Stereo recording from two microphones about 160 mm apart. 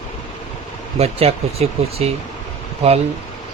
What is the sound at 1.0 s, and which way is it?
Speech, 40° right (ahead or behind).